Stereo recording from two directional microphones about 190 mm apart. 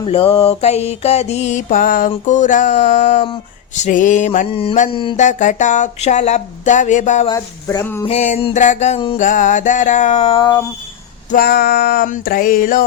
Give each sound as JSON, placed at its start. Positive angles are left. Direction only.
{"t": 0.0, "sound": "mantra", "side_deg": 30}
{"t": 5.1, "sound": "mantra", "side_deg": 40}
{"t": 7.3, "sound": "a sound", "side_deg": 20}
{"t": 8.0, "sound": "mantra", "side_deg": 35}
{"t": 9.1, "sound": "mantra", "side_deg": 45}
{"t": 11.3, "sound": "a sound", "side_deg": 55}